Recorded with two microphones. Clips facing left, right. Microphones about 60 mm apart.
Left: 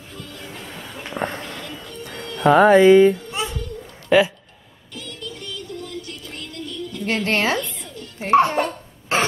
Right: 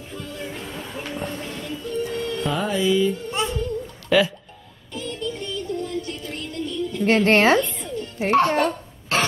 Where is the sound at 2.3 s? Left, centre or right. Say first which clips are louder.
Left 15 dB; left.